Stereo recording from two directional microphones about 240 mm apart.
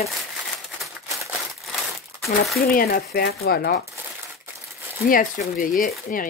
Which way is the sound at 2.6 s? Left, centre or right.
Left.